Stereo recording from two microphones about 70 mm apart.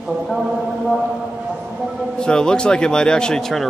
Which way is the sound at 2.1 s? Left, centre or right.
Centre.